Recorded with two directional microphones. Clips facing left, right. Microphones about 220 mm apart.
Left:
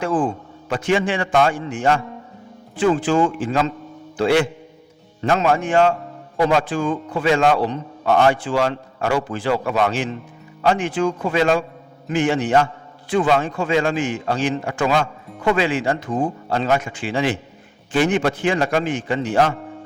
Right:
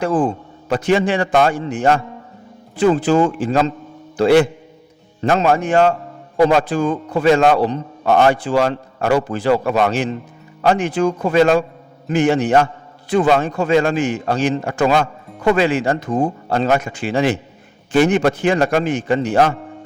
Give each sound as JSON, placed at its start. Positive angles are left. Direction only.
{"t": 0.0, "sound": "speech", "side_deg": -40}